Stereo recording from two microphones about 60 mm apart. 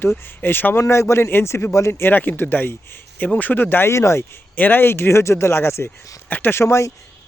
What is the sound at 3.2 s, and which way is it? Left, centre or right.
Speech, left.